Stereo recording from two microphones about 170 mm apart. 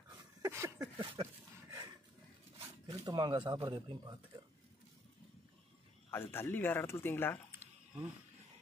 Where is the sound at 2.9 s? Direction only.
20° right (ahead or behind).